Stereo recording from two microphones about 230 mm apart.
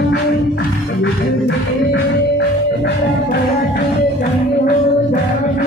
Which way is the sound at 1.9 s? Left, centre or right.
Left.